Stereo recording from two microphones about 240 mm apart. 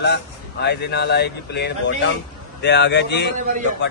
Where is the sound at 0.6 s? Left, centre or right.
Left.